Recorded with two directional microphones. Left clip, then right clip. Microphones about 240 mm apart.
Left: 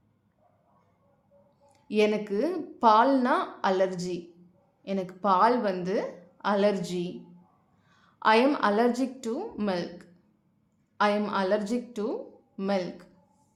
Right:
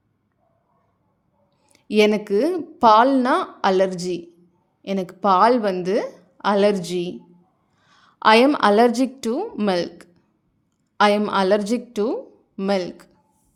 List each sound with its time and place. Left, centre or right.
1.6 s a woman's voice: right